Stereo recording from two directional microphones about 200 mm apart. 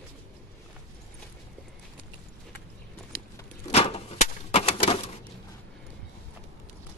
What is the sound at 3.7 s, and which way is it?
Typewriter, 30° left (ahead or behind).